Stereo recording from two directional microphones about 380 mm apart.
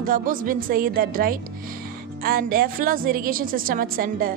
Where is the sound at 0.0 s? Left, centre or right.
Right.